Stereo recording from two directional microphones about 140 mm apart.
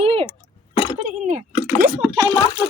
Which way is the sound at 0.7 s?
30° left (ahead or behind).